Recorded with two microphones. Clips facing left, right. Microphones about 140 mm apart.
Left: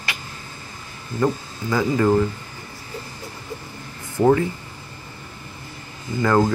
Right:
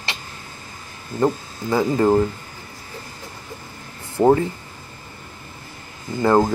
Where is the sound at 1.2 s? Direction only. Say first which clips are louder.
Right 2 dB; 25° right (ahead or behind).